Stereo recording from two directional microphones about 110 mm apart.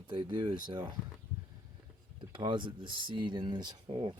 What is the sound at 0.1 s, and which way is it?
Speech, 45° right (ahead or behind).